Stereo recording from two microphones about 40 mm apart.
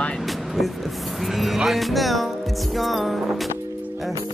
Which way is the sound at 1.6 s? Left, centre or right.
Centre.